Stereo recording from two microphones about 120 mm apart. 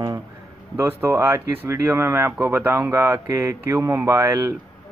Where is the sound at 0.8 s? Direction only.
20° right (ahead or behind).